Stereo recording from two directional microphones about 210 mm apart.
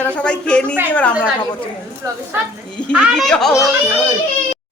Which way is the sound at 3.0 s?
Centre (ahead or behind).